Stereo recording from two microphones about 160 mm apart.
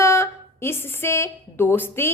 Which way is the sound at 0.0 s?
15° left (ahead or behind).